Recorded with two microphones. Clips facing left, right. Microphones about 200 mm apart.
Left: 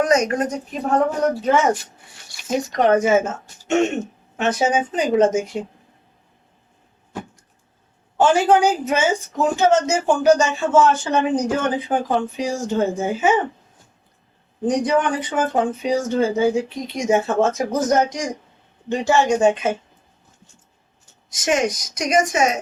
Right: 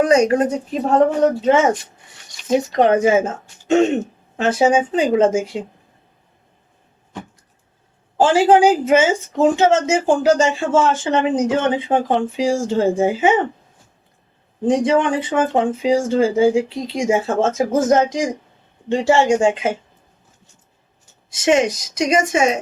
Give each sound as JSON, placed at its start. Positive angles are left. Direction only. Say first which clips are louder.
{"t": 0.0, "sound": "speech", "louder": "right 4 dB", "side_deg": -30}
{"t": 2.7, "sound": "speech", "louder": "right 1 dB", "side_deg": -30}
{"t": 3.7, "sound": "throat clearing", "louder": "right 4 dB", "side_deg": -30}
{"t": 4.4, "sound": "speech", "louder": "right 4 dB", "side_deg": -30}
{"t": 8.2, "sound": "speech", "louder": "right 3 dB", "side_deg": -30}
{"t": 14.7, "sound": "speech", "louder": "right 3 dB", "side_deg": -25}
{"t": 21.2, "sound": "speech", "louder": "right 4 dB", "side_deg": -25}